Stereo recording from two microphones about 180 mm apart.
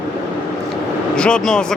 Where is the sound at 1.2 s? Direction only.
5° left (ahead or behind).